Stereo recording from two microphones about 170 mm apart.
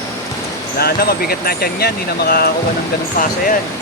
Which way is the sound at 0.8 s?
65° left (ahead or behind).